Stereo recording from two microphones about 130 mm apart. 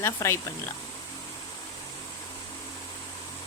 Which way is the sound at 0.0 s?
20° left (ahead or behind).